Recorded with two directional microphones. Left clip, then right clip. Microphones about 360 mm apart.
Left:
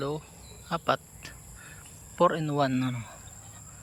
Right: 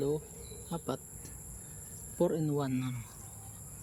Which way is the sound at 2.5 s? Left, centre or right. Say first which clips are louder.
Left 8 dB; left.